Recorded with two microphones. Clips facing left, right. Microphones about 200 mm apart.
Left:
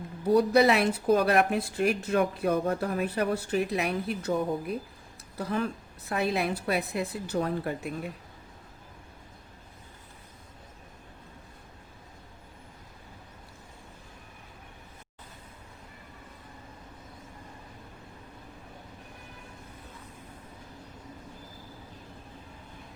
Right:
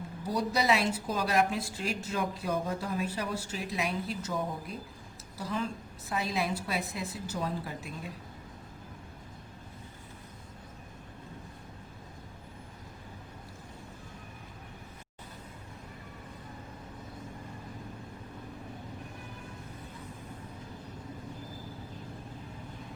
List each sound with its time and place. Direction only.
0.3 s speech: 60° left (ahead or behind)